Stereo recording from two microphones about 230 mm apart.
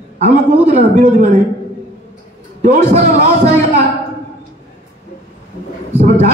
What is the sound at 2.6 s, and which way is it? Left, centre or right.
Speech, right.